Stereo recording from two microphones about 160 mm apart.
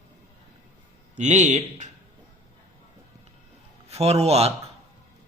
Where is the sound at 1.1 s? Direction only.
50° right (ahead or behind).